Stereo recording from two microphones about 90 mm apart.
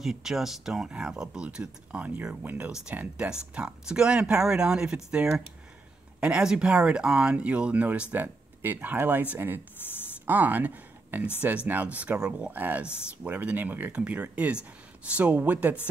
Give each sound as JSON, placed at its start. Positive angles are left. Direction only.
{"t": 0.0, "sound": "speech", "side_deg": -5}